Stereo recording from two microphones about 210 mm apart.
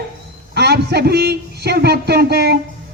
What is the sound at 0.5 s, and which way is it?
A man's voice, 50° right (ahead or behind).